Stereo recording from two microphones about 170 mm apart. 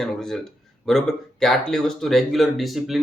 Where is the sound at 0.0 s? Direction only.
Centre (ahead or behind).